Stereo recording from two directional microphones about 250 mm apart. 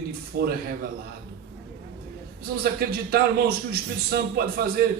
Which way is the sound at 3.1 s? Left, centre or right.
Right.